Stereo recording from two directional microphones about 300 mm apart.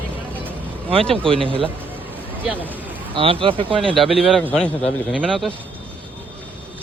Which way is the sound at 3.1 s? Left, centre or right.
Centre.